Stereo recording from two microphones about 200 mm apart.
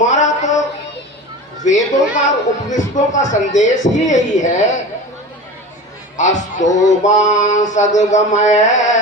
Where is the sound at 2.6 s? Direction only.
35° left (ahead or behind).